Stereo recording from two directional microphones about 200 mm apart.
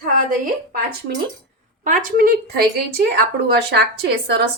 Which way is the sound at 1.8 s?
40° right (ahead or behind).